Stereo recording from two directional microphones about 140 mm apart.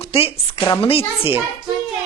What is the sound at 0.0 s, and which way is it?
A woman's voice, 40° left (ahead or behind).